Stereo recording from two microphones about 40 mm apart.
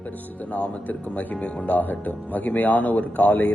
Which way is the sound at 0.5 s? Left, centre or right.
Left.